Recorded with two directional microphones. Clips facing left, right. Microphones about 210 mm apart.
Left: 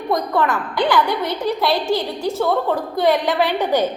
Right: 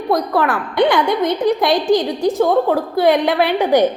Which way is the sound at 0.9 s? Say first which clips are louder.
Even; 20° right (ahead or behind).